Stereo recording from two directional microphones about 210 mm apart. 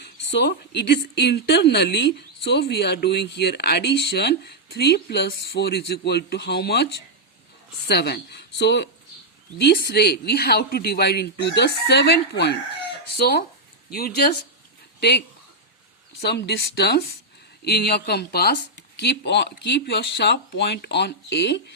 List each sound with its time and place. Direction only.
0.0 s a woman's voice: 55° left (ahead or behind)
7.9 s a woman's voice: 50° left (ahead or behind)
16.2 s a woman's voice: 50° left (ahead or behind)